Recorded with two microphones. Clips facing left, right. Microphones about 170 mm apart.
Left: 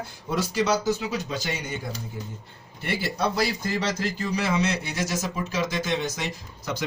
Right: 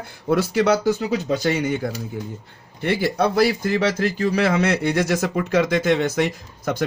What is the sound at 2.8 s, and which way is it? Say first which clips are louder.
A man's voice: right 7 dB; 60° right (ahead or behind).